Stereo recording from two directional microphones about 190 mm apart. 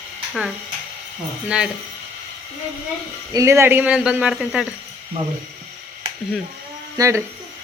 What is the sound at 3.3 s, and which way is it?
A woman's voice, 15° right (ahead or behind).